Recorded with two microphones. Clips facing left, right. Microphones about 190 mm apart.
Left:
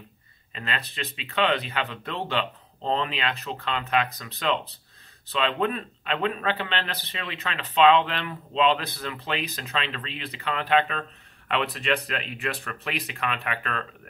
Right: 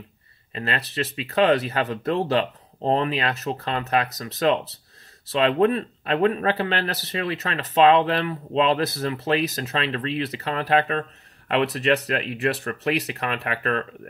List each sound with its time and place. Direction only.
0.6 s speech: 35° right (ahead or behind)